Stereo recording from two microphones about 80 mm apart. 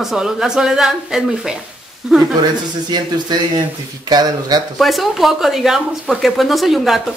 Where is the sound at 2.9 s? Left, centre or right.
Right.